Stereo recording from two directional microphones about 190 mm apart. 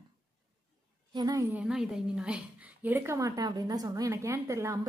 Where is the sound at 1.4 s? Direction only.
5° right (ahead or behind).